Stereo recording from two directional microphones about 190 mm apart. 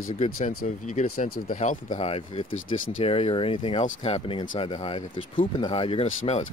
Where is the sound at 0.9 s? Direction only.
45° left (ahead or behind).